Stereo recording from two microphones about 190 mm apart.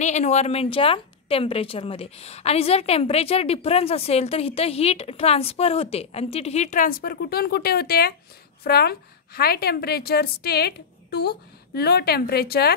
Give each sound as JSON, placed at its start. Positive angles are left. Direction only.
{"t": 0.0, "sound": "a woman's voice", "side_deg": 35}